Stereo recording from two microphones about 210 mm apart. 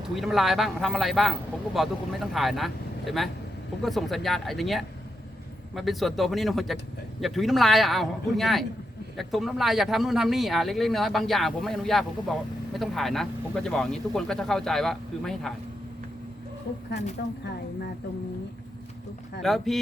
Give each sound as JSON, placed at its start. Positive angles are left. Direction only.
{"t": 0.2, "sound": "speech", "side_deg": 0}
{"t": 16.7, "sound": "speech", "side_deg": 50}
{"t": 19.4, "sound": "speech", "side_deg": 0}